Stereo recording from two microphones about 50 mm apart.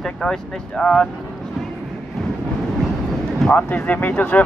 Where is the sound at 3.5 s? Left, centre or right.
Left.